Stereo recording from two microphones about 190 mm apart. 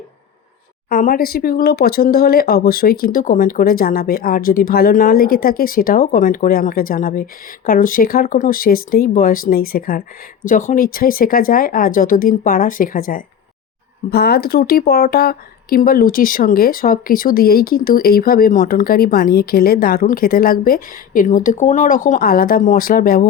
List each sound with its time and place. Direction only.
0.9 s a woman's voice: 50° left (ahead or behind)